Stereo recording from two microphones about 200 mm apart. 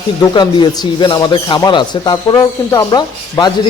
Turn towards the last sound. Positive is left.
turn(degrees=20)  # may be behind; listen again after turning